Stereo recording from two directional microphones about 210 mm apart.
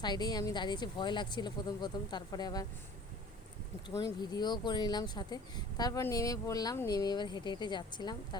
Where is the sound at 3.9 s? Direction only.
20° left (ahead or behind).